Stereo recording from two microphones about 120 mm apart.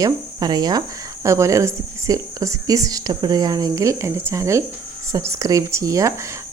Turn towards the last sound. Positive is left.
turn(degrees=-25)  # may be behind; listen again after turning